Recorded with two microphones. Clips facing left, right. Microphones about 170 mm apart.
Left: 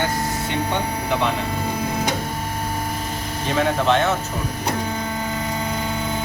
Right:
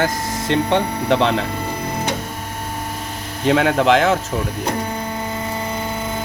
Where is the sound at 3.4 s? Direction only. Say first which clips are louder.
Right 5 dB; 90° right.